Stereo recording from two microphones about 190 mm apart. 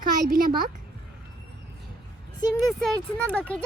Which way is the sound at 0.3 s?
50° right (ahead or behind).